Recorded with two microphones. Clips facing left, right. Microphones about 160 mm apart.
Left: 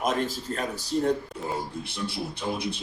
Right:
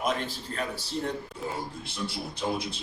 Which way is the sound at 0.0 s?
40° left (ahead or behind).